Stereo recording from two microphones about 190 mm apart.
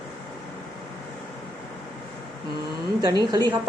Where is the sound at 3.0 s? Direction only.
20° right (ahead or behind).